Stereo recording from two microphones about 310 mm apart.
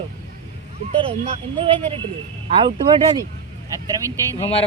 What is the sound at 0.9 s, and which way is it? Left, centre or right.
Speech, centre.